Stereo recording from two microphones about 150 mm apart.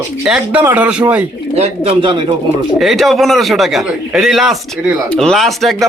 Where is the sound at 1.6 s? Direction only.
45° right (ahead or behind).